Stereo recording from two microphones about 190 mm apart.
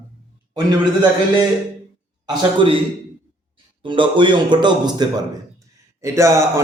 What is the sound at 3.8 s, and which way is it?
Speech, 25° right (ahead or behind).